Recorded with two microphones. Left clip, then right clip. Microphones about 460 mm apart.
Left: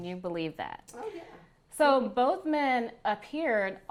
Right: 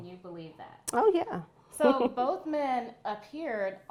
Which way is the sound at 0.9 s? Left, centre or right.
Right.